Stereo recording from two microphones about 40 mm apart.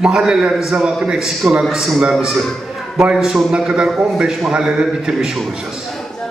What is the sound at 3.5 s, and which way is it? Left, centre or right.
A man's voice, right.